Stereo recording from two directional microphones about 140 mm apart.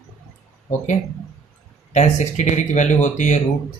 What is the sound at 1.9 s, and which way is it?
Speech, 55° left (ahead or behind).